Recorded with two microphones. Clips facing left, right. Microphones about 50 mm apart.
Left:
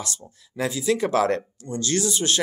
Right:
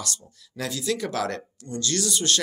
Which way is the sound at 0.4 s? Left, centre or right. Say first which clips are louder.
Left 6 dB; centre.